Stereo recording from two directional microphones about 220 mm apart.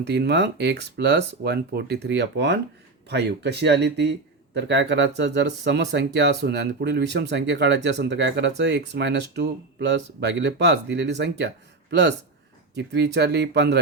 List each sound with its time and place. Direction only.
0.0 s speech: 50° right (ahead or behind)